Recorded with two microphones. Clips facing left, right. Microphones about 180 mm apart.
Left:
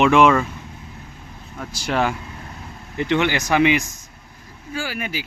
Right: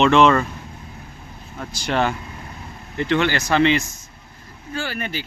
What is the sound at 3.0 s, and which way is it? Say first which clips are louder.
Speech: even; 15° left (ahead or behind).